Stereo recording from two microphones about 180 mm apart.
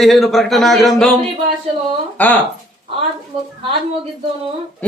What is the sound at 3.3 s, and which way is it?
Speech, 30° right (ahead or behind).